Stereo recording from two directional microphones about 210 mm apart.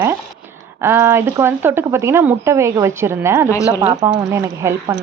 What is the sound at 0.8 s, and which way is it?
Speech, 10° right (ahead or behind).